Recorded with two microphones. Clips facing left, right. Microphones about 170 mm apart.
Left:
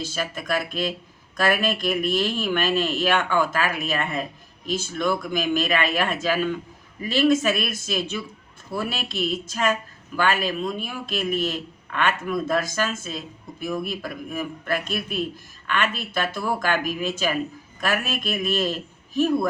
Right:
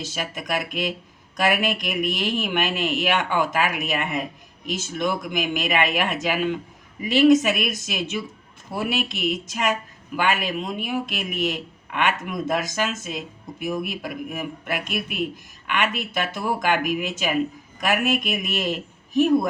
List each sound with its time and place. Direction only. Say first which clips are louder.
0.0 s a man's voice: left 1 dB; 20° right (ahead or behind)